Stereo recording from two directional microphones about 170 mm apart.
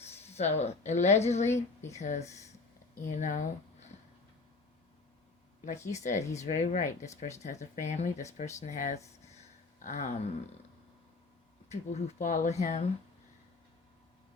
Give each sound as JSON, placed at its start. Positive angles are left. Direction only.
{"t": 0.3, "sound": "speech", "side_deg": 40}
{"t": 1.5, "sound": "speech", "side_deg": 15}
{"t": 2.0, "sound": "speech", "side_deg": 45}
{"t": 5.9, "sound": "speech", "side_deg": 45}
{"t": 11.7, "sound": "speech", "side_deg": 40}